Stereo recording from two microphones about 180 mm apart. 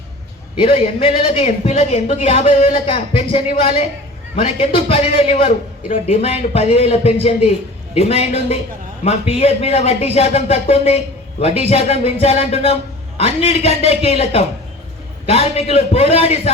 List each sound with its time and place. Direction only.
0.5 s a man's voice: 30° left (ahead or behind)